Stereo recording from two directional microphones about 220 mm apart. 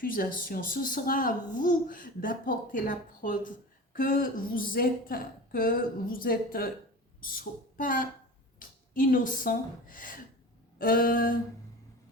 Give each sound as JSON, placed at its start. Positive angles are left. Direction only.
{"t": 0.0, "sound": "a woman's voice", "side_deg": 40}